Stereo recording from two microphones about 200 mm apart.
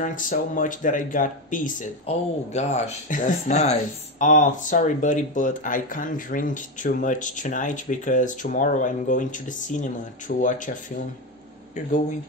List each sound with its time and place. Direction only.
0.0 s speech: 40° left (ahead or behind)